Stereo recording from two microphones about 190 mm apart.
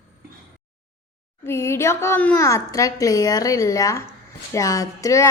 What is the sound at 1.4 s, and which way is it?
A child's voice, 15° left (ahead or behind).